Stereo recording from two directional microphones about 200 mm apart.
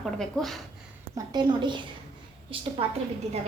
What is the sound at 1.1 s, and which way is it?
A woman's voice, 20° right (ahead or behind).